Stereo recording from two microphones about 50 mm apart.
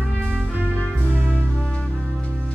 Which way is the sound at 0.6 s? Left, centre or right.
Left.